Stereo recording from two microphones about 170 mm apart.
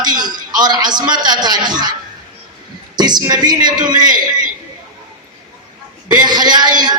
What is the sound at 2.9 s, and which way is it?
Speech, 25° right (ahead or behind).